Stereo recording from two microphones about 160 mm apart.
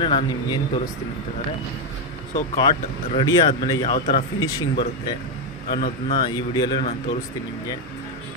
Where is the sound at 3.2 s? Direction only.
25° left (ahead or behind).